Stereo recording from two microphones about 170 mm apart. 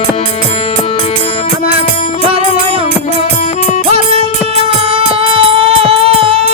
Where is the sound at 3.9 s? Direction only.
40° right (ahead or behind).